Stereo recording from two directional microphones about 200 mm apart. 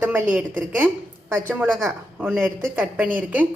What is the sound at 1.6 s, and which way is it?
A woman's voice, centre (ahead or behind).